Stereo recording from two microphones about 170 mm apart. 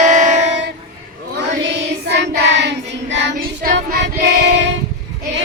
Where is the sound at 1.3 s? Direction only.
90° right.